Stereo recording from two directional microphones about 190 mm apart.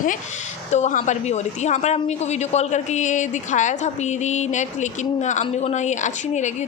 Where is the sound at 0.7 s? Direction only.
40° left (ahead or behind).